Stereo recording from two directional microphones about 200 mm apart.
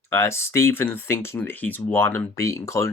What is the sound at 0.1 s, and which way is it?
Speech, 15° left (ahead or behind).